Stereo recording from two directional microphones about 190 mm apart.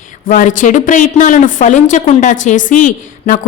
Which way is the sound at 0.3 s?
40° left (ahead or behind).